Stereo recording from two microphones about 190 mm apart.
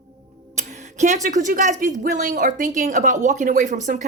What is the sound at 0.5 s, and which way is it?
Speech, 40° right (ahead or behind).